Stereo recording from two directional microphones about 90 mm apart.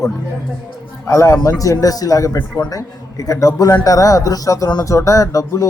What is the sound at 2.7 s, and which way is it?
Speech, 40° left (ahead or behind).